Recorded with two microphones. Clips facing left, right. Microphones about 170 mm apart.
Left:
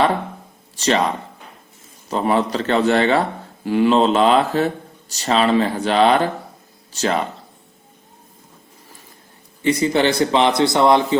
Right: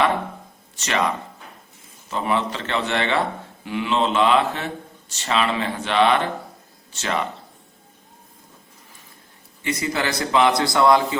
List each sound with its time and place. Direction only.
0.8 s speech: 35° left (ahead or behind)
9.6 s a man's voice: 30° left (ahead or behind)